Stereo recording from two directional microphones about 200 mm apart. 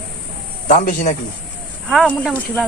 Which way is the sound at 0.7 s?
35° left (ahead or behind).